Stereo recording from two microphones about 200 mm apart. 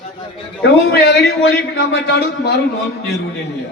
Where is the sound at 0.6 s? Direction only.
55° left (ahead or behind).